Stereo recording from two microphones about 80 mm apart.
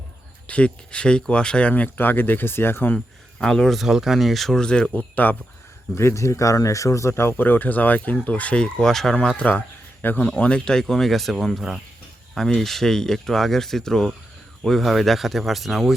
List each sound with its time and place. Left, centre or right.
0.4 s speech: centre
3.4 s speech: centre; by 5.4 s left
5.9 s speech: left; by 15.9 s centre